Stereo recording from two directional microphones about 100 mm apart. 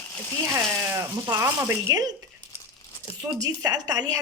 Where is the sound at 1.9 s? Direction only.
40° right (ahead or behind).